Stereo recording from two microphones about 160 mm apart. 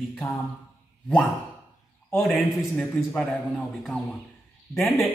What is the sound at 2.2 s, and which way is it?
Speech, centre (ahead or behind).